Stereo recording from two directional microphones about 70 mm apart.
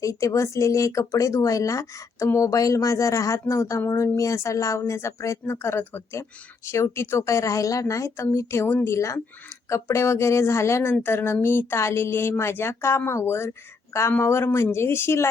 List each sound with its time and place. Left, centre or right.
0.0 s speech: left